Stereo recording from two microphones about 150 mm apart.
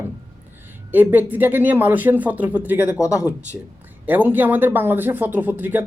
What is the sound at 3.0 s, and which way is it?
Speech, 20° left (ahead or behind).